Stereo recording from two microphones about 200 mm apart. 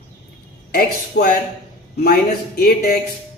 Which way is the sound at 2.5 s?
45° left (ahead or behind).